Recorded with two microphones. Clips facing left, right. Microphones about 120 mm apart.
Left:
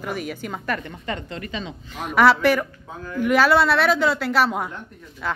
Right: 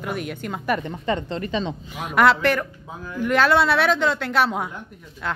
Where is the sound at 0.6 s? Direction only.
20° right (ahead or behind).